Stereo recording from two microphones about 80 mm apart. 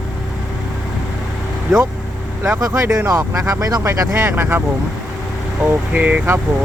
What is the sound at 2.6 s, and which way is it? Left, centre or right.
Speech, right.